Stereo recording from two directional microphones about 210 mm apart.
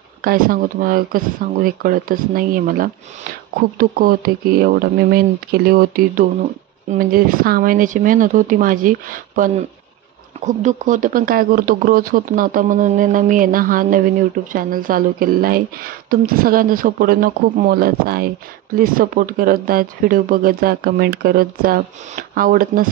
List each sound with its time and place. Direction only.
0.2 s speech: 45° right (ahead or behind)